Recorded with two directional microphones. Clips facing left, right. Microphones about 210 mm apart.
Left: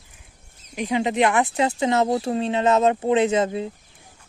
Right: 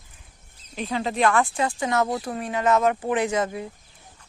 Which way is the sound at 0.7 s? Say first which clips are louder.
Left 4 dB; 15° left (ahead or behind).